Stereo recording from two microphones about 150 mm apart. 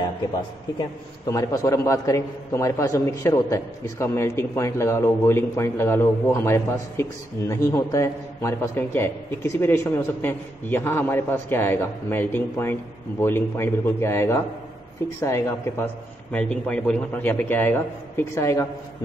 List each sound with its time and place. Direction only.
1.3 s a man's voice: 25° left (ahead or behind)